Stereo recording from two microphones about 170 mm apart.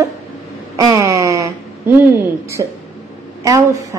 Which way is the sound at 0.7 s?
20° right (ahead or behind).